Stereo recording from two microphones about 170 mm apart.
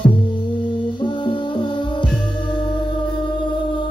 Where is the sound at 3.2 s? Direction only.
30° left (ahead or behind).